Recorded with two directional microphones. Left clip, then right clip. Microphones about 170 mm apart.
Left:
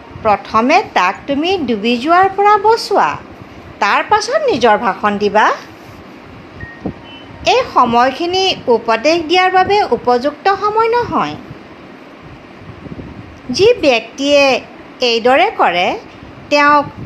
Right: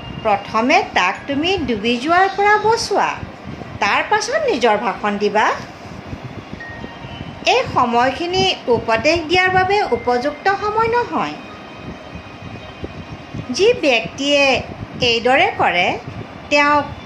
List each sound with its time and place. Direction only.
0.2 s a woman's voice: 25° left (ahead or behind)
7.4 s a woman's voice: 30° left (ahead or behind)
13.5 s a woman's voice: 30° left (ahead or behind)